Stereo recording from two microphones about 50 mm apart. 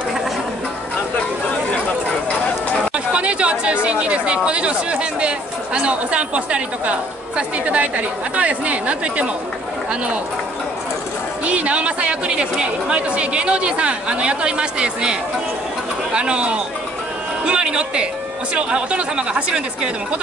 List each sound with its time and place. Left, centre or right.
2.9 s speech: right
11.4 s speech: right